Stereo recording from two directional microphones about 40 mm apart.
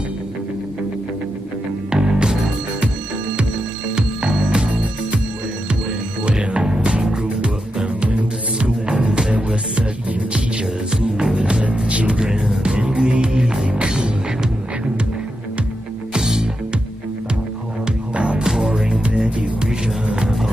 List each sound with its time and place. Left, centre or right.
1.9 s music: right
3.9 s music: centre
4.6 s music: right
6.2 s music: right
10.3 s music: right
16.1 s music: centre
18.1 s music: right
18.4 s music: centre
19.0 s music: right